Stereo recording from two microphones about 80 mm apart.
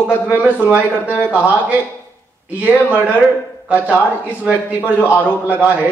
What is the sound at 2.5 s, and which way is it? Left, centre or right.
A man's voice, centre.